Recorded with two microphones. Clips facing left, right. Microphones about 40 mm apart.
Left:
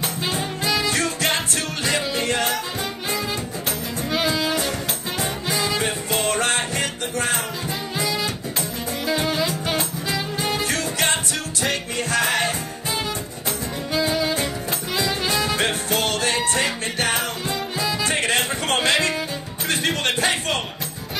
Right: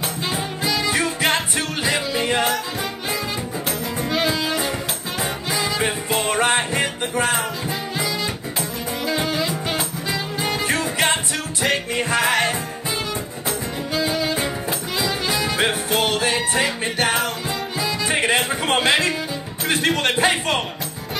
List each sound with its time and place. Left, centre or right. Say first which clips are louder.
0.0 s music: even; centre
0.8 s music: right 2 dB; centre
8.0 s music: left 3 dB; centre
10.6 s music: right 2 dB; centre
13.9 s music: even; centre
18.0 s music: right 4 dB; centre
19.7 s music: right 3 dB; centre